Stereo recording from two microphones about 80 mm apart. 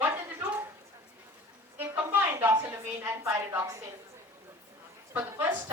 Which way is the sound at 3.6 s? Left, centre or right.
Right.